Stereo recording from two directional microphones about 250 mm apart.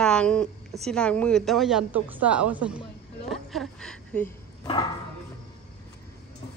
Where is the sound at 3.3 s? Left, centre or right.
Centre.